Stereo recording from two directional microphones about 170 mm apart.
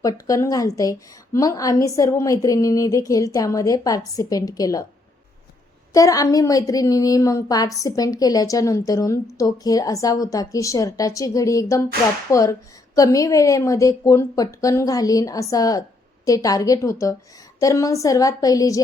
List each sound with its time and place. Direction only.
0.0 s a woman's voice: 20° left (ahead or behind)
5.9 s a woman's voice: 20° left (ahead or behind)